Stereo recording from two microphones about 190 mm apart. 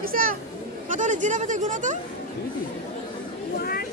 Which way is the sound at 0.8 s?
40° right (ahead or behind).